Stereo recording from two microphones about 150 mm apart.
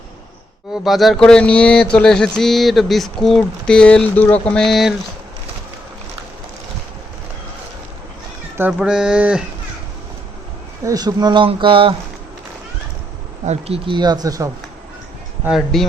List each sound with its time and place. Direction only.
0.7 s speech: centre (ahead or behind)
8.8 s speech: 5° right (ahead or behind)
10.8 s speech: 25° right (ahead or behind)
13.4 s speech: 45° right (ahead or behind); by 14.5 s 20° right (ahead or behind)
15.4 s speech: centre (ahead or behind)